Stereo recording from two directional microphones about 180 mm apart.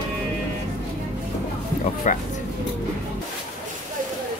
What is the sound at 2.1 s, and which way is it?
Speech, 45° left (ahead or behind).